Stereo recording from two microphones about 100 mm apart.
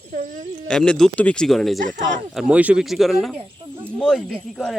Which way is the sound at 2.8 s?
Centre (ahead or behind).